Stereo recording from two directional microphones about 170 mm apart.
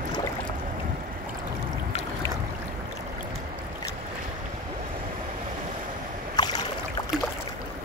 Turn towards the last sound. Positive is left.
turn(degrees=25)  # may be behind; listen again after turning